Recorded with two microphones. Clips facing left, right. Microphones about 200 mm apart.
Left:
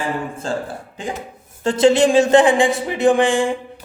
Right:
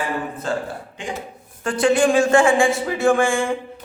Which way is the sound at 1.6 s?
25° left (ahead or behind).